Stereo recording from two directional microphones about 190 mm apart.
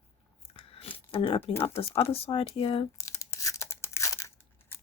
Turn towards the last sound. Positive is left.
turn(degrees=15)  # may be behind; listen again after turning